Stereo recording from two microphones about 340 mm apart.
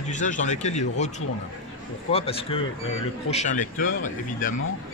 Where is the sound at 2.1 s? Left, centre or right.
Centre.